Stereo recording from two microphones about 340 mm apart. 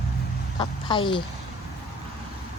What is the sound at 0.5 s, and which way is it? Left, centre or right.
Speech, centre.